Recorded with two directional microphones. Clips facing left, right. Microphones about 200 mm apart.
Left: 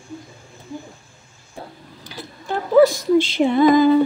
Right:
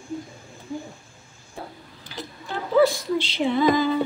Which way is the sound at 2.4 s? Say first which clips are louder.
Left 5 dB; 45° left (ahead or behind).